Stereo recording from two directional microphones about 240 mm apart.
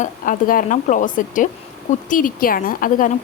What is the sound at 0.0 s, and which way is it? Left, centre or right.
Speech, left.